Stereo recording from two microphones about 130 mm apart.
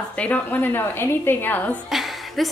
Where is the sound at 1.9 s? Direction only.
Centre (ahead or behind).